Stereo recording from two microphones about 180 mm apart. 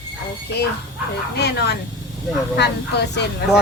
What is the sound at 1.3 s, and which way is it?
Speech, 65° left (ahead or behind).